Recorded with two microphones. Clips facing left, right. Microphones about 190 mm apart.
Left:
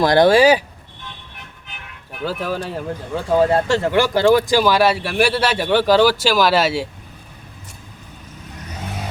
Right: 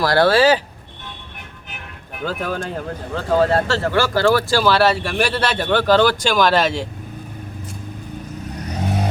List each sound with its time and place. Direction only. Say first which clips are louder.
0.0 s speech: left 2 dB; 20° left (ahead or behind)
2.2 s speech: left 1 dB; 5° left (ahead or behind)